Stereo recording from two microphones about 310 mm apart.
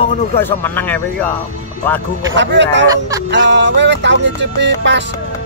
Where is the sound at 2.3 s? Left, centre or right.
Right.